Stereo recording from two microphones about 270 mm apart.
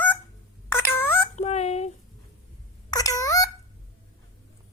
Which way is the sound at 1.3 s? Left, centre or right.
Left.